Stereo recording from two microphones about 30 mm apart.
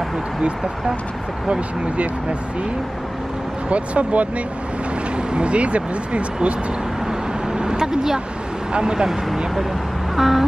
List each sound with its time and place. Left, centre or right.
3.7 s speech: right
5.3 s speech: right
7.5 s speech: right
10.1 s a sound: centre